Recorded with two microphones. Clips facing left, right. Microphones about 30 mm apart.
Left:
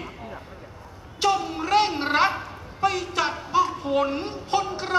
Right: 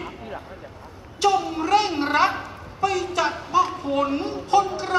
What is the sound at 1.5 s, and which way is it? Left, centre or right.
Gargling, centre.